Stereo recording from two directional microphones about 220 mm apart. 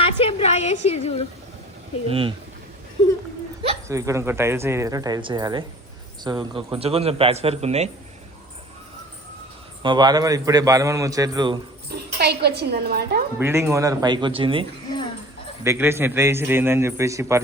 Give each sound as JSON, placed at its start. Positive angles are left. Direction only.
{"t": 0.0, "sound": "a woman's voice", "side_deg": 25}
{"t": 2.0, "sound": "a man's voice", "side_deg": -25}
{"t": 3.8, "sound": "a man's voice", "side_deg": -15}
{"t": 9.8, "sound": "speech", "side_deg": -20}
{"t": 11.9, "sound": "a woman's voice", "side_deg": -50}
{"t": 13.4, "sound": "a man's voice", "side_deg": -10}
{"t": 15.6, "sound": "speech", "side_deg": -10}